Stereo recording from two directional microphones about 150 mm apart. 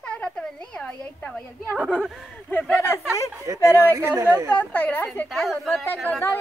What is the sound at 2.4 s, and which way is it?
Speech, 10° left (ahead or behind).